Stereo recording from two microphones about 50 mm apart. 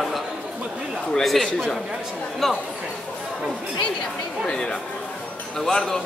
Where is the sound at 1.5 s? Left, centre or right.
Centre.